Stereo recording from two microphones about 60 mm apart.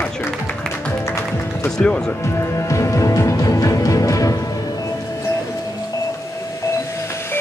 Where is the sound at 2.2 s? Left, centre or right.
Left.